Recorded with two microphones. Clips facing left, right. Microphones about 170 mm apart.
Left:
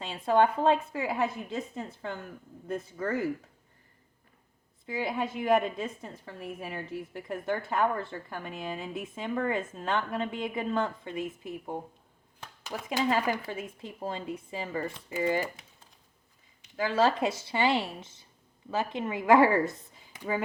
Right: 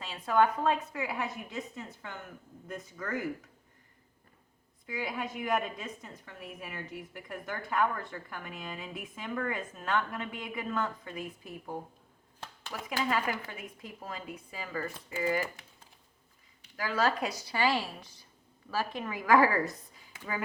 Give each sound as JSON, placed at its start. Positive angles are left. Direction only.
{"t": 0.0, "sound": "a woman's voice", "side_deg": 30}
{"t": 4.9, "sound": "a woman's voice", "side_deg": 25}
{"t": 13.1, "sound": "a woman's voice", "side_deg": 30}
{"t": 16.7, "sound": "a woman's voice", "side_deg": 25}